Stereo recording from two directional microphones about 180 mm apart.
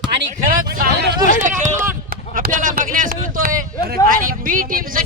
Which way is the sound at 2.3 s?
50° right (ahead or behind).